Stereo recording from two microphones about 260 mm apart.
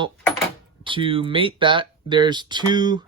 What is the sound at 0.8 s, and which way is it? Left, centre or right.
Speech, centre.